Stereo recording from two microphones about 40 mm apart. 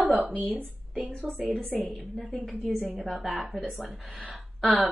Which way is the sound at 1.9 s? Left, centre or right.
Right.